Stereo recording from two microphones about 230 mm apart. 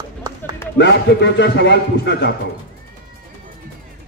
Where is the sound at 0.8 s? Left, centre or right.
Left.